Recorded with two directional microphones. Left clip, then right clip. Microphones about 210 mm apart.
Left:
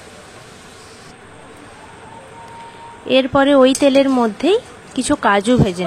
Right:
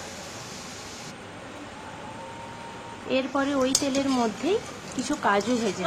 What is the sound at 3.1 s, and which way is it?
Speech, 40° left (ahead or behind).